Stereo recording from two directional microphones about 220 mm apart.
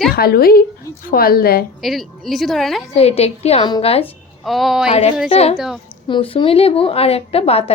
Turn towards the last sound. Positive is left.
turn(degrees=25)  # may be behind; listen again after turning